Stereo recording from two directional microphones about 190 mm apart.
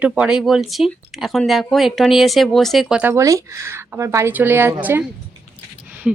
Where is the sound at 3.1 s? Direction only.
15° right (ahead or behind).